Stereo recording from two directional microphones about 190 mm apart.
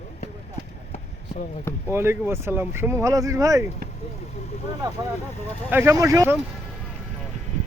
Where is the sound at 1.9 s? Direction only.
10° right (ahead or behind).